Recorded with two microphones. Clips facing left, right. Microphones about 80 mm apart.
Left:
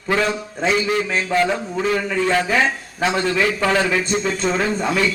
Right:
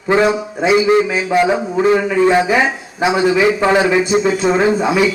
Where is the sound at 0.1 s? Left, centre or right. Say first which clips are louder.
Right 7 dB; right.